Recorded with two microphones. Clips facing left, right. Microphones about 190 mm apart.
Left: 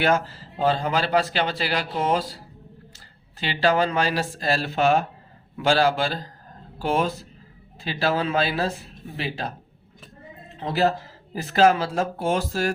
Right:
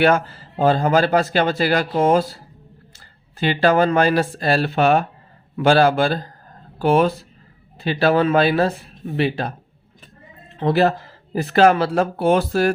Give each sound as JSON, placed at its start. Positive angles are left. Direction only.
{"t": 0.0, "sound": "speech", "side_deg": -55}
{"t": 3.4, "sound": "speech", "side_deg": -50}
{"t": 10.6, "sound": "speech", "side_deg": -60}